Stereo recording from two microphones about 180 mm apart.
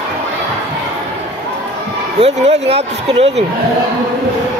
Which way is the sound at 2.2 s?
35° right (ahead or behind).